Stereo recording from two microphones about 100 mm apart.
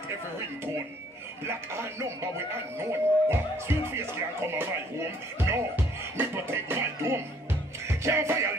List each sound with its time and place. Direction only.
1.4 s speech: 25° right (ahead or behind)
7.9 s music: 30° right (ahead or behind)